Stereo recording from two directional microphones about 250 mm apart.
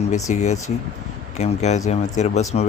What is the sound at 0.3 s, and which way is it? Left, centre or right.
Speech, left.